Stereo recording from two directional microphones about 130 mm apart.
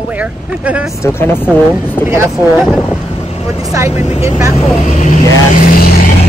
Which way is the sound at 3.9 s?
55° left (ahead or behind).